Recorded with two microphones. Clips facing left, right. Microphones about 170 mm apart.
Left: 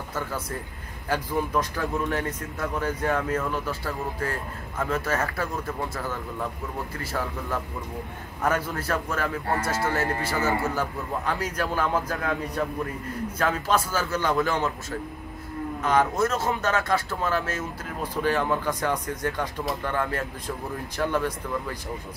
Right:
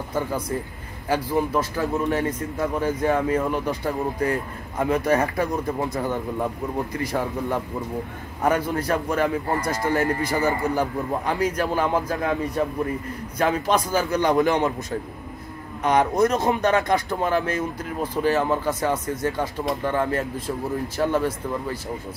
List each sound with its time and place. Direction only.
0.1 s speech: 15° right (ahead or behind)